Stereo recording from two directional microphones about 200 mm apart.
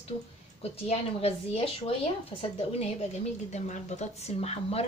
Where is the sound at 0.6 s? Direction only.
30° left (ahead or behind).